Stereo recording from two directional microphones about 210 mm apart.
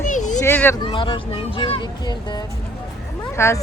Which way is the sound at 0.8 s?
25° left (ahead or behind).